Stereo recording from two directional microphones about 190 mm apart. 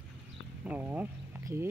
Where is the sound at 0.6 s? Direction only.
10° right (ahead or behind).